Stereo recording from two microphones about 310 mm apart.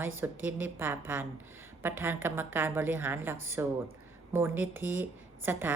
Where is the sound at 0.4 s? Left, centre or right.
Centre.